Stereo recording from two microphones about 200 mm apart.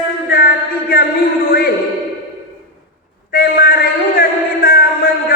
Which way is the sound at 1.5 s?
50° left (ahead or behind).